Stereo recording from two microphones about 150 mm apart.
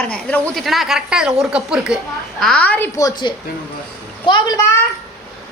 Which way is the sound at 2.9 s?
25° left (ahead or behind).